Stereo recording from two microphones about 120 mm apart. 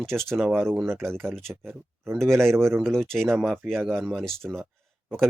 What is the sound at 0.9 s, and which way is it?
Speech, 20° right (ahead or behind).